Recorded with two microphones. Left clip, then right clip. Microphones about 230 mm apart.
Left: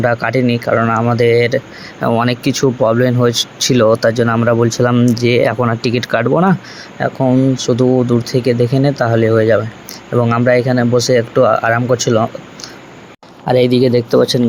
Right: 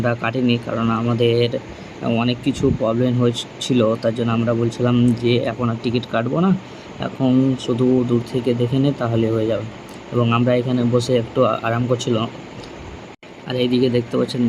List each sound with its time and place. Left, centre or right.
0.0 s speech: centre
0.3 s speech: left
0.7 s speech: left
1.2 s speech: left
2.0 s speech: left
13.5 s speech: left